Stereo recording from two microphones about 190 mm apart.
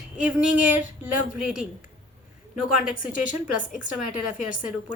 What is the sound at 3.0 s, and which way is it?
Speech, 45° left (ahead or behind).